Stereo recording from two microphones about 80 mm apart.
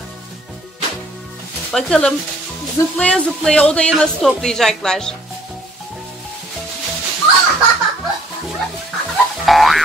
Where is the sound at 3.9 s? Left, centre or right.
Centre.